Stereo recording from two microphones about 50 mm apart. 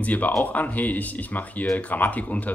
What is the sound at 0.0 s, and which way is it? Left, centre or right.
Speech, left.